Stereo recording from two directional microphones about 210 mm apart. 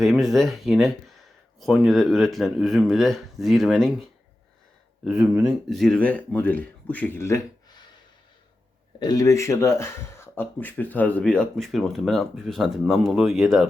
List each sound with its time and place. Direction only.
0.0 s speech: centre (ahead or behind)
5.0 s speech: 5° right (ahead or behind); by 7.9 s 15° left (ahead or behind)
9.0 s speech: 20° left (ahead or behind); by 13.7 s centre (ahead or behind)